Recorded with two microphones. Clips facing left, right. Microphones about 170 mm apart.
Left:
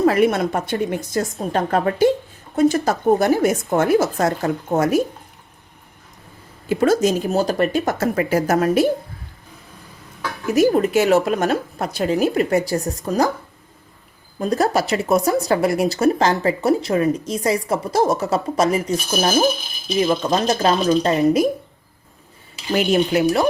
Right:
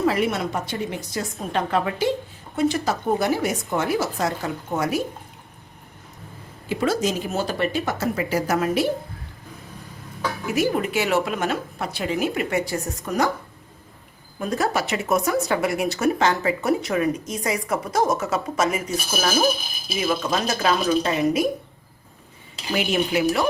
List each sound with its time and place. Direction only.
0.0 s a woman's voice: 50° left (ahead or behind)
6.7 s a woman's voice: 45° left (ahead or behind)
10.5 s speech: 40° left (ahead or behind)
14.3 s speech: 35° left (ahead or behind)
20.0 s speech: 35° left (ahead or behind)
22.7 s speech: 40° left (ahead or behind)